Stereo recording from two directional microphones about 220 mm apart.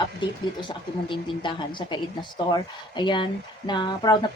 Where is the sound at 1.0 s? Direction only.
20° left (ahead or behind).